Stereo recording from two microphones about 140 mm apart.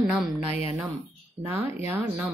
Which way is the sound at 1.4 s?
15° right (ahead or behind).